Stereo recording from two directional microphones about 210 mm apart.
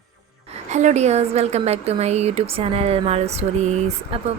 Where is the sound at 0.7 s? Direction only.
35° right (ahead or behind).